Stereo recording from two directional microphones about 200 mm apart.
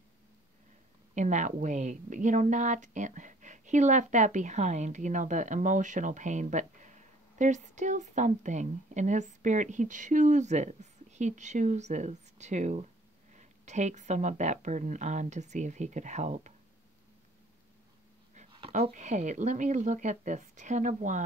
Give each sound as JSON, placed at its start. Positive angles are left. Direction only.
{"t": 1.1, "sound": "a woman's voice", "side_deg": -35}
{"t": 18.3, "sound": "a woman's voice", "side_deg": -35}